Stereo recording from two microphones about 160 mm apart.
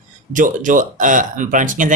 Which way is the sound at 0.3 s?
55° right (ahead or behind).